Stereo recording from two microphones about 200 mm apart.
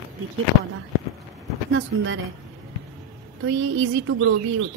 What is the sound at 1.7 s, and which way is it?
Speech, 70° right (ahead or behind).